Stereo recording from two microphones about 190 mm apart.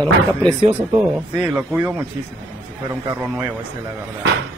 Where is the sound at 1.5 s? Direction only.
5° right (ahead or behind).